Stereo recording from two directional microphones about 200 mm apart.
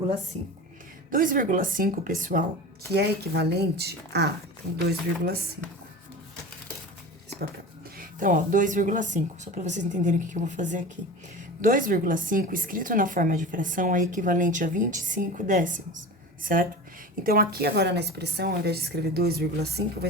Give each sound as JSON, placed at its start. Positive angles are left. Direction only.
{"t": 1.1, "sound": "a woman's voice", "side_deg": -45}
{"t": 2.9, "sound": "a woman's voice", "side_deg": -55}
{"t": 7.9, "sound": "a woman's voice", "side_deg": -40}